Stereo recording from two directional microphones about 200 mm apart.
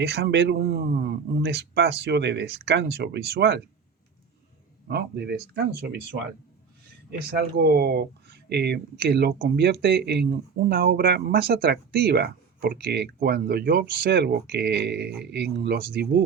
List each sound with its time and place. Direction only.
0.0 s a man's voice: 55° right (ahead or behind)
4.9 s a man's voice: 55° right (ahead or behind)
7.3 s speech: 50° right (ahead or behind)